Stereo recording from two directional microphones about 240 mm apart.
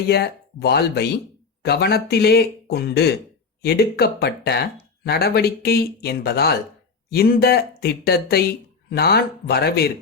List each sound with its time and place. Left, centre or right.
0.1 s speech: left